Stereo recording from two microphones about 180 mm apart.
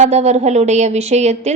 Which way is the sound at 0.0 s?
40° right (ahead or behind).